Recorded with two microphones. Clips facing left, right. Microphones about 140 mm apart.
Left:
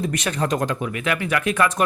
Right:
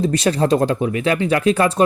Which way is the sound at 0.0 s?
30° right (ahead or behind).